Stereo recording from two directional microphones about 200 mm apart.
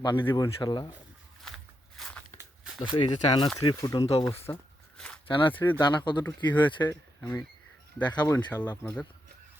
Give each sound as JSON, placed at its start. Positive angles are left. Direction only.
{"t": 0.0, "sound": "speech", "side_deg": 20}
{"t": 2.0, "sound": "walk", "side_deg": 5}
{"t": 2.8, "sound": "speech", "side_deg": 20}
{"t": 4.5, "sound": "speech", "side_deg": 15}
{"t": 4.9, "sound": "a sound", "side_deg": 5}
{"t": 5.3, "sound": "speech", "side_deg": 25}
{"t": 5.5, "sound": "speech", "side_deg": 10}
{"t": 5.8, "sound": "speech", "side_deg": 20}